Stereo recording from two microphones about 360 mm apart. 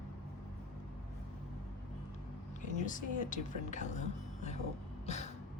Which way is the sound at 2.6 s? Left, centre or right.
Left.